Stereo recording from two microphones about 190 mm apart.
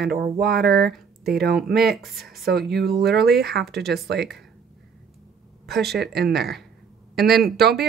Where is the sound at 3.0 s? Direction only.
55° right (ahead or behind).